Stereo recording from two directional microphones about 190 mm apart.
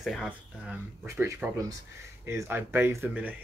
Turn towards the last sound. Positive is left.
turn(degrees=-10)  # may be behind; listen again after turning